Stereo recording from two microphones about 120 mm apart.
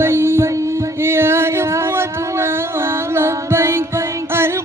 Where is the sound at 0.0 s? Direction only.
20° right (ahead or behind).